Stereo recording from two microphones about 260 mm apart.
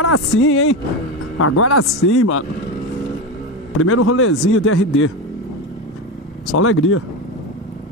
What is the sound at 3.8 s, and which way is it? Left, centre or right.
A man's voice, left.